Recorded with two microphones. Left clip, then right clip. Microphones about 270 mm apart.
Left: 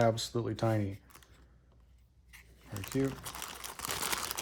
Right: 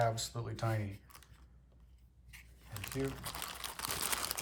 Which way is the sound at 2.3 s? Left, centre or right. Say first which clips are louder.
Left 4 dB; centre.